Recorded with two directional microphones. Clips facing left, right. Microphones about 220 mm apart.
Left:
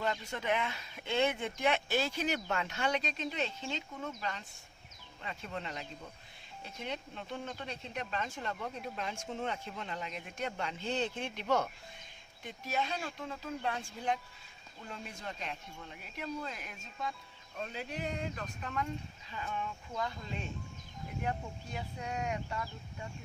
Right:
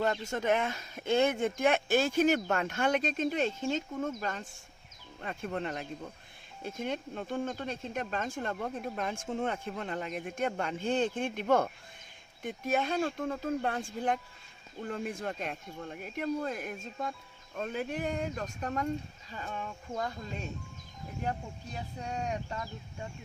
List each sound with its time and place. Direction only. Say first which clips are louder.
0.0 s speech: right 5 dB; 45° right (ahead or behind)
21.2 s speech: right 2 dB; 35° right (ahead or behind)